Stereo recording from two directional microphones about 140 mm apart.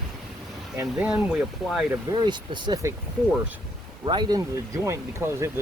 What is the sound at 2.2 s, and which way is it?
Speech, 30° right (ahead or behind).